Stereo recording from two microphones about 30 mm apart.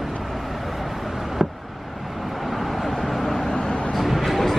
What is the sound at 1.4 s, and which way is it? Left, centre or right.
Vehicle, centre.